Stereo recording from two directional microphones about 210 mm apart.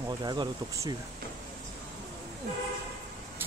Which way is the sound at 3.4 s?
10° right (ahead or behind).